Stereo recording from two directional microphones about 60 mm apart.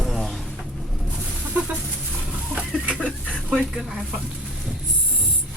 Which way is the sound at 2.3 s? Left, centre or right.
Centre.